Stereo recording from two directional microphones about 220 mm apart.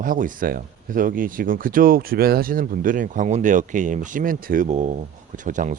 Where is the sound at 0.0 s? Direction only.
40° right (ahead or behind).